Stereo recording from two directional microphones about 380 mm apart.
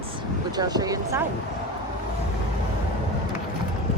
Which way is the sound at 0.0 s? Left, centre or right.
Centre.